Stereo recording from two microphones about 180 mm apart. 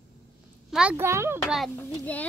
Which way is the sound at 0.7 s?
5° right (ahead or behind).